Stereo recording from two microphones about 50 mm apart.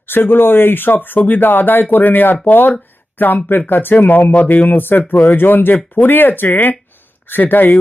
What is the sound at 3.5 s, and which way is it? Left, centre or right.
Speech, left.